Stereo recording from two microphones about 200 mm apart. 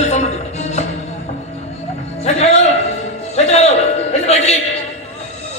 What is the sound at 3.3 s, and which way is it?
Music, 35° left (ahead or behind).